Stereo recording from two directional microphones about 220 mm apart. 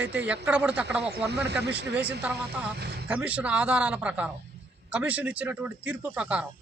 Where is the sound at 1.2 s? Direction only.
50° right (ahead or behind).